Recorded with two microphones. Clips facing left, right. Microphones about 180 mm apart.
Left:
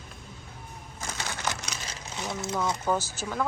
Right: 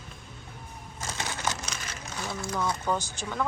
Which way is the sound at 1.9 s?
20° left (ahead or behind).